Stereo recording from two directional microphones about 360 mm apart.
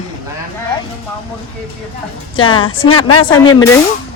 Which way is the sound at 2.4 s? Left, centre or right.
Centre.